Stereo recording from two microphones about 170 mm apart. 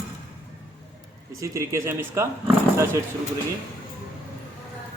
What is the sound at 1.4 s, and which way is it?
Speech, 15° right (ahead or behind).